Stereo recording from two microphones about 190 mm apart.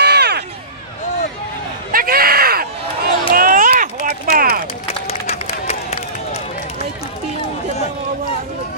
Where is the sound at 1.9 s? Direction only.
50° right (ahead or behind).